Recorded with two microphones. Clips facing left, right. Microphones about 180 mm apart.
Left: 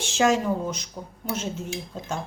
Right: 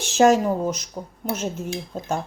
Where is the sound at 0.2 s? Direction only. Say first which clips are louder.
Right 5 dB; 45° right (ahead or behind).